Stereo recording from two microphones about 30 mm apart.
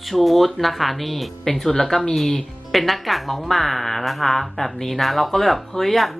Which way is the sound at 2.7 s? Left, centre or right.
Centre.